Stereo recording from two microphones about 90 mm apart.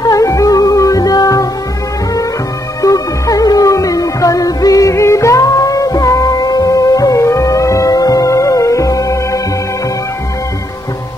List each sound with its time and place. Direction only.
0.0 s music: 40° left (ahead or behind)
2.8 s music: 40° left (ahead or behind)